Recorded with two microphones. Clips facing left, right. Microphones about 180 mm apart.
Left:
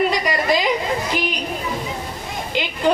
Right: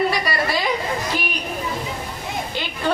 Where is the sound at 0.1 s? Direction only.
15° left (ahead or behind).